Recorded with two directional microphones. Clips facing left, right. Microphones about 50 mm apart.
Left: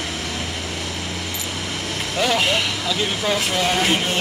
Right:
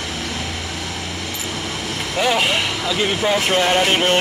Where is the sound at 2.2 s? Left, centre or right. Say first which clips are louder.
Right 2 dB; centre.